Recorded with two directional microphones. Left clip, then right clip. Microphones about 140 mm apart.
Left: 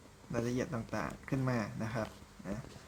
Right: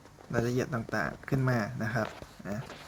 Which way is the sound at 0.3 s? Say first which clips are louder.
Right 5 dB; 15° right (ahead or behind).